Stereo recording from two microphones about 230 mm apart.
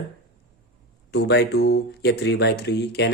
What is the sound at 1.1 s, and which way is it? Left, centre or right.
Speech, left.